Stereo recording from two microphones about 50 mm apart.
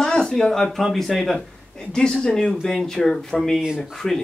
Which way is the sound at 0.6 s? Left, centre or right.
Centre.